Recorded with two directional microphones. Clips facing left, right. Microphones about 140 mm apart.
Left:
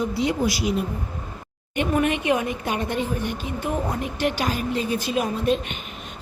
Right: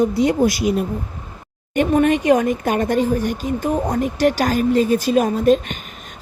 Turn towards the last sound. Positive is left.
turn(degrees=-40)  # may be behind; listen again after turning